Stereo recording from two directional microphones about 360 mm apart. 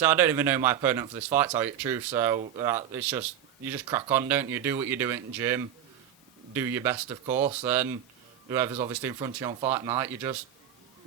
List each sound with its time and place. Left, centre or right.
0.0 s speech: centre
7.3 s speech: centre
7.5 s speech: centre